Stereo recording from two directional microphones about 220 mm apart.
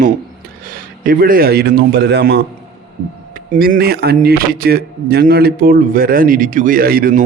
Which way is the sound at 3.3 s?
40° right (ahead or behind).